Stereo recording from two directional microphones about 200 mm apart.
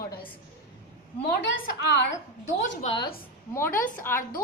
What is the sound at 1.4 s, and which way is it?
Speech, 60° left (ahead or behind).